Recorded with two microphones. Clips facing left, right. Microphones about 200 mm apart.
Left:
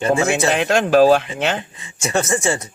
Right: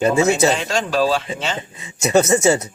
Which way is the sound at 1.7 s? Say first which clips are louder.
Right 5 dB; 25° right (ahead or behind).